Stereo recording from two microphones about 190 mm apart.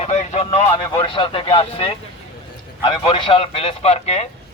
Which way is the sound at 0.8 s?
20° left (ahead or behind).